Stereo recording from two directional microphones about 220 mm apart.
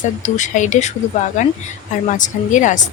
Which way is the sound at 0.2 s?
35° left (ahead or behind).